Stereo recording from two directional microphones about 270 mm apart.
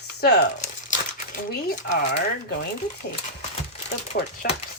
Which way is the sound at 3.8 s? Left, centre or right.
Left.